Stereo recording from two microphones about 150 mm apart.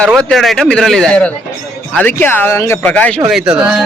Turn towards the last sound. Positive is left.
turn(degrees=-5)  # may be behind; listen again after turning